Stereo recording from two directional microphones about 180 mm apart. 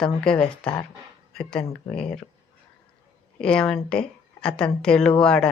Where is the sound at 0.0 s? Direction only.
5° left (ahead or behind).